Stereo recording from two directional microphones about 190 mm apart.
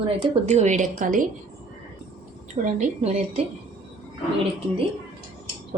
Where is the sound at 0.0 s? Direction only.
35° right (ahead or behind).